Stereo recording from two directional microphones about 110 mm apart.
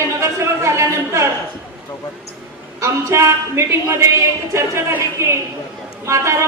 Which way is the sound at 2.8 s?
25° right (ahead or behind).